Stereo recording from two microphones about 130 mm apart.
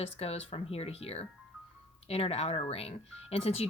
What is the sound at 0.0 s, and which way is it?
Speech, 50° left (ahead or behind).